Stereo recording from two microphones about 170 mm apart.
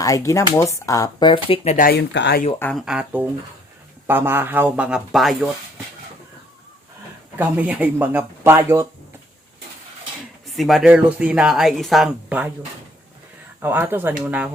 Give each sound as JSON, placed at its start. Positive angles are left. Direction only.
{"t": 0.0, "sound": "speech", "side_deg": 20}
{"t": 1.7, "sound": "speech", "side_deg": 60}
{"t": 2.7, "sound": "speech", "side_deg": -5}
{"t": 7.3, "sound": "speech", "side_deg": -10}
{"t": 10.4, "sound": "speech", "side_deg": 0}
{"t": 13.6, "sound": "speech", "side_deg": -10}